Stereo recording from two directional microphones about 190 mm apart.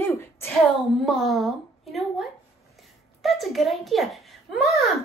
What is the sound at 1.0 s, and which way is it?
A child's voice, centre (ahead or behind).